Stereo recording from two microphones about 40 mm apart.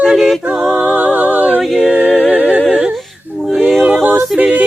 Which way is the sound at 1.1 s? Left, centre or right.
Right.